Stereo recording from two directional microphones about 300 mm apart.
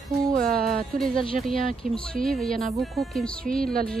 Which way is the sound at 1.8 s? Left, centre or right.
Right.